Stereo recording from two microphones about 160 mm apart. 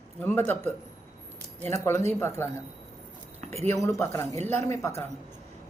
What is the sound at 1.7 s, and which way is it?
Speech, 20° left (ahead or behind).